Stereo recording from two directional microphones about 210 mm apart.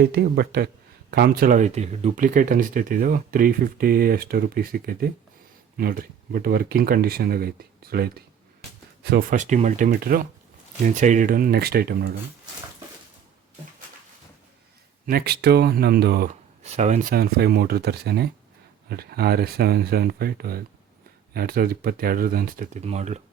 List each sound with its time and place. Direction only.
0.0 s speech: 50° right (ahead or behind)
15.0 s speech: 45° right (ahead or behind)